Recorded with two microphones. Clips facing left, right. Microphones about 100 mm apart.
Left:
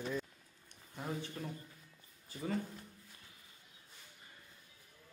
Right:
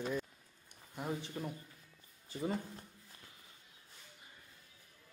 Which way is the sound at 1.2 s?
20° right (ahead or behind).